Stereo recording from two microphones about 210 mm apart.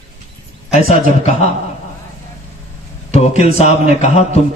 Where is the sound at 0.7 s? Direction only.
30° left (ahead or behind).